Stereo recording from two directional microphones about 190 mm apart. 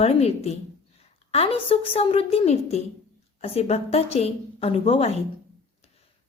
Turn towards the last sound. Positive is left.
turn(degrees=30)  # may be behind; listen again after turning